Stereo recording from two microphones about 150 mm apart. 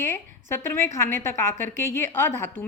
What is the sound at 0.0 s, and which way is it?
A woman's voice, 15° left (ahead or behind).